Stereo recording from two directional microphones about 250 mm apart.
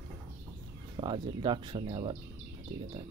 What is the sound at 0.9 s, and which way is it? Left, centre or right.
Speech, centre.